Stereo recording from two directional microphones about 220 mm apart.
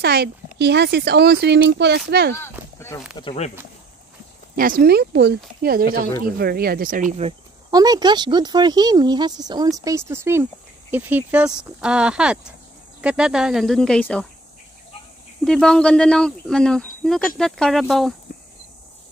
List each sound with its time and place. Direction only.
0.0 s speech: 45° right (ahead or behind)
3.2 s speech: 25° left (ahead or behind)
4.6 s speech: 40° right (ahead or behind)
7.7 s speech: 15° right (ahead or behind); by 14.2 s 5° left (ahead or behind)
15.4 s speech: 5° left (ahead or behind)